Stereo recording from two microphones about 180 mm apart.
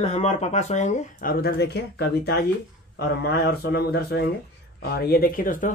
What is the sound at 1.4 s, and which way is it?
Speech, 65° left (ahead or behind).